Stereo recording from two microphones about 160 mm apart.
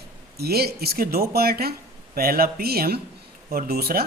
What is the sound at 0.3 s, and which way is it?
A man's voice, 75° right (ahead or behind).